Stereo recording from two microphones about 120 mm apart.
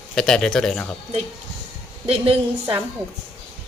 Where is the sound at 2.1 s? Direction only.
55° right (ahead or behind).